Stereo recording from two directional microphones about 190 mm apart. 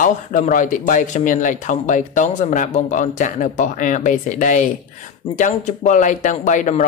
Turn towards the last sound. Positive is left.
turn(degrees=40)  # may be behind; listen again after turning